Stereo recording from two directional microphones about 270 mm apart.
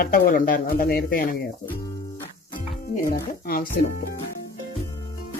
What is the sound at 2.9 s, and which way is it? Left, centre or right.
Speech, left.